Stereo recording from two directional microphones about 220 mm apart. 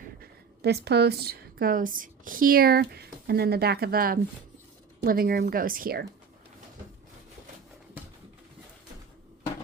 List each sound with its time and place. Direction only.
0.2 s a woman's voice: 50° right (ahead or behind)